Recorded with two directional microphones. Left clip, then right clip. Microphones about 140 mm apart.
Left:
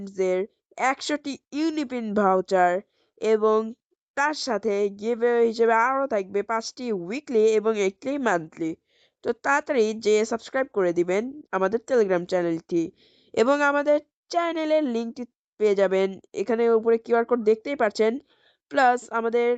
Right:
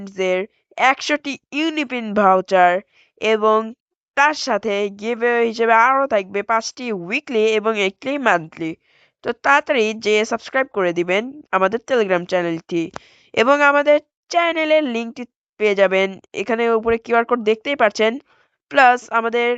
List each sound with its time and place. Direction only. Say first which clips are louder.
0.0 s speech: right 5 dB; 20° right (ahead or behind)